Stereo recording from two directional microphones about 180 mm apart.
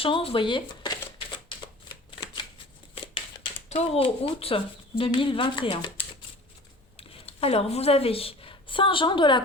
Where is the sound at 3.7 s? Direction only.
35° left (ahead or behind).